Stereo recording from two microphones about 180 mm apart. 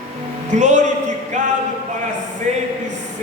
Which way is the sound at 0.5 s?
40° right (ahead or behind).